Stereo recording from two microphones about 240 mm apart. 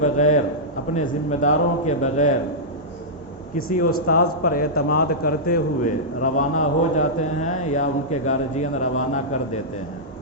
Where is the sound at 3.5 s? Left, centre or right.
Left.